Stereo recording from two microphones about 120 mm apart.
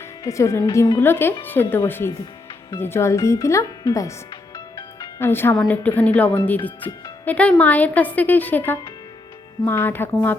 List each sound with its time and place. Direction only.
0.3 s speech: 25° left (ahead or behind)
5.2 s a woman's voice: 20° left (ahead or behind)